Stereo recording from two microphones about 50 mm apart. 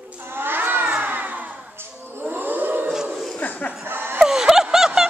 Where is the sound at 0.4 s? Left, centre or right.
Right.